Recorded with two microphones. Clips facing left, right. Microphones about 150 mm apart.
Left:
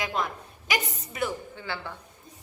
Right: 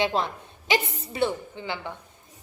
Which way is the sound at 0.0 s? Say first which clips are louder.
Right 5 dB; 30° right (ahead or behind).